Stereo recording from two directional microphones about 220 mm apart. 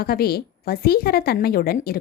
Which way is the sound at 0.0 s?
45° left (ahead or behind).